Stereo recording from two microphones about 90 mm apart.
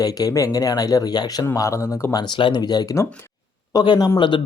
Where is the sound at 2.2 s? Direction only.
65° left (ahead or behind).